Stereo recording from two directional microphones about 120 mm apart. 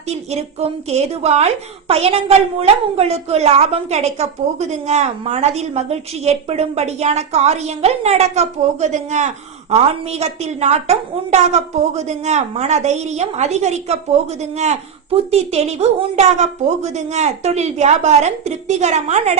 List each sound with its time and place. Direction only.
0.1 s a woman's voice: 60° right (ahead or behind)